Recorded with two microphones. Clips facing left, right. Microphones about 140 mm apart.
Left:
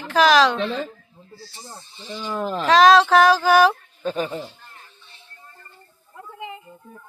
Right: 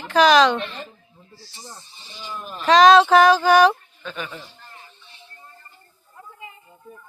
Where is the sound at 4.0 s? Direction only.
40° left (ahead or behind).